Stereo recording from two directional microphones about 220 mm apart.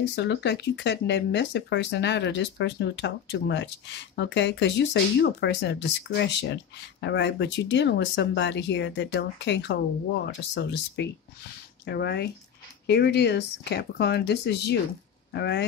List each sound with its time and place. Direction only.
0.1 s speech: 50° left (ahead or behind)